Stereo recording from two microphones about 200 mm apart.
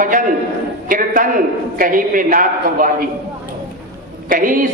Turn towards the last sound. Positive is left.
turn(degrees=-45)  # may be behind; listen again after turning